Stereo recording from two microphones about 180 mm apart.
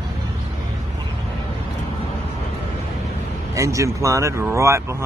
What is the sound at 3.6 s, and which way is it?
Speech, 15° right (ahead or behind).